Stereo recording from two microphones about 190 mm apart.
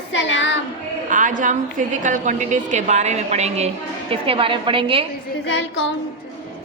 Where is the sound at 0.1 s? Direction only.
75° left (ahead or behind).